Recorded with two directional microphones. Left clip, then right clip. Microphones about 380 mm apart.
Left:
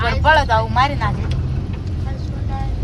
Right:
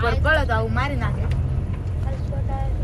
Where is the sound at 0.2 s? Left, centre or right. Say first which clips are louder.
Left 7 dB; centre.